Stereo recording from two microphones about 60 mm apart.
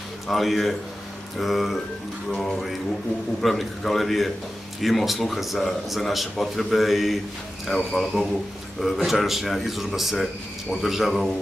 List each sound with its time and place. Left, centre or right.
0.3 s a man's voice: centre